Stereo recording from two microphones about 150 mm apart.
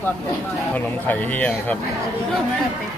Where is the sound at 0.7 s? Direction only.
10° left (ahead or behind).